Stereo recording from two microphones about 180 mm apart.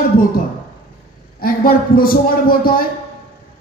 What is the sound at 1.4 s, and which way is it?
A man's voice, 55° left (ahead or behind).